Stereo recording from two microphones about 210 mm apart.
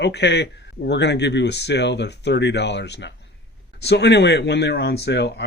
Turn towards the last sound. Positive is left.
turn(degrees=55)  # may be behind; listen again after turning